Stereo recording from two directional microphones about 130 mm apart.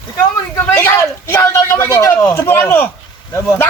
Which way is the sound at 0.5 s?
20° left (ahead or behind).